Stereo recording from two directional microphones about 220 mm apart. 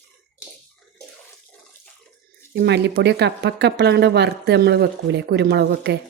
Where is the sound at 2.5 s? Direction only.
50° right (ahead or behind).